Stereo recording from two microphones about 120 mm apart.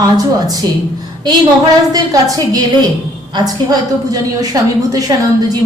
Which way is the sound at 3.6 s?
30° right (ahead or behind).